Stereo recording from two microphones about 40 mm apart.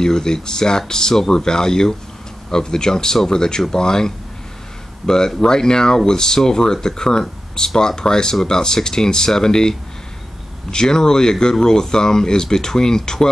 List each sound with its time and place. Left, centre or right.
0.0 s speech: centre